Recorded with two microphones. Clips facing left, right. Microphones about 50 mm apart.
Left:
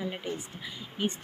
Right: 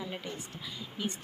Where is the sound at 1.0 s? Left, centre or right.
Left.